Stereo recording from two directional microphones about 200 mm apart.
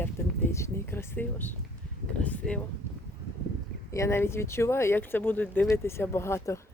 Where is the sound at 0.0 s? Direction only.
10° left (ahead or behind).